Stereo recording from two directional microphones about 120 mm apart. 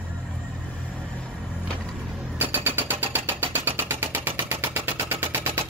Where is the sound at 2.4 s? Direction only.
15° right (ahead or behind).